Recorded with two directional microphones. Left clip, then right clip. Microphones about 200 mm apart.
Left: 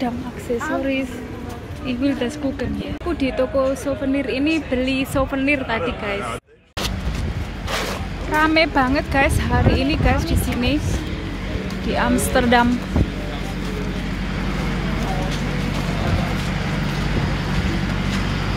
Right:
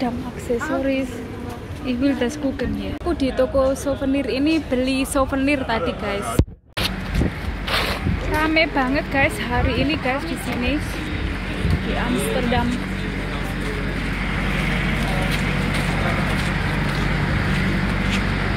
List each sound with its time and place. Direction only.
1.9 s speech: 10° right (ahead or behind)
7.7 s speech: 15° left (ahead or behind)
12.0 s speech: 30° left (ahead or behind)